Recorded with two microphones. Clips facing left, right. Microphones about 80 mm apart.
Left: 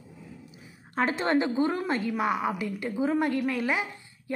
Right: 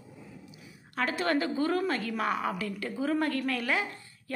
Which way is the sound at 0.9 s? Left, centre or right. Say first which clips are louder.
Left 3 dB; left.